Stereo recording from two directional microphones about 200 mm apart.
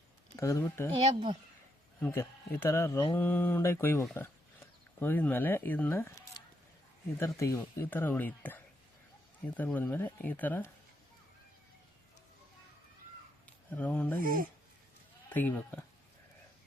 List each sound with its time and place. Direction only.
0.3 s speech: 15° left (ahead or behind)
2.0 s speech: 10° left (ahead or behind)
13.7 s speech: 10° left (ahead or behind)
14.2 s speech: 45° right (ahead or behind)
15.3 s speech: 10° left (ahead or behind)